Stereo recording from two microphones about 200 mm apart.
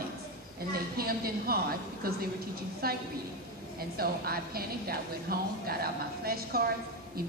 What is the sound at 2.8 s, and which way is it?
A woman's voice, 50° right (ahead or behind).